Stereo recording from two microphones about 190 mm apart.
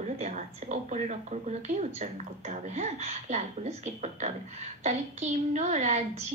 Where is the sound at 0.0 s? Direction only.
40° right (ahead or behind).